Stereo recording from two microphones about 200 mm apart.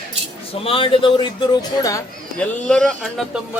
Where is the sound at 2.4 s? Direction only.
5° left (ahead or behind).